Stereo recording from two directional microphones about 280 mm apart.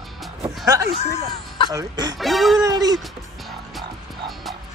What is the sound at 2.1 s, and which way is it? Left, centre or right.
Speech, centre.